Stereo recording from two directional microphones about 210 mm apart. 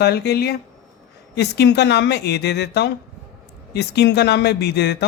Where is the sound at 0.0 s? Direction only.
50° left (ahead or behind).